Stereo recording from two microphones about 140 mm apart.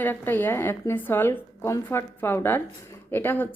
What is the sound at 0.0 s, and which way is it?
A woman's voice, 15° left (ahead or behind).